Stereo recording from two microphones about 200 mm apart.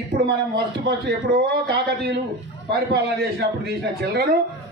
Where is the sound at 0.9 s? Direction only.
55° right (ahead or behind).